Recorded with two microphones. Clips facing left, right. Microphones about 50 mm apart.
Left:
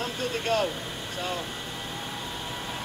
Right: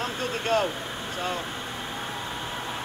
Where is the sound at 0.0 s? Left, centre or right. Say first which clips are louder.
Right 1 dB; right.